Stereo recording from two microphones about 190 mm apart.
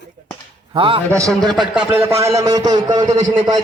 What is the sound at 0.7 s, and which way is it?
Speech, 25° right (ahead or behind).